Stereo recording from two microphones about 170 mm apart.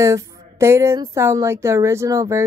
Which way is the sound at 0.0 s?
20° right (ahead or behind).